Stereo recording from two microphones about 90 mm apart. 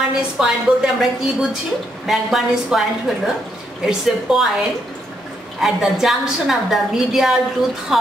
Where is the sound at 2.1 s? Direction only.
Centre (ahead or behind).